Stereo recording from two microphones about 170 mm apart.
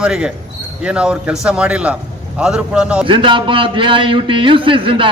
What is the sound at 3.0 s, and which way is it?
A man's voice, 30° right (ahead or behind).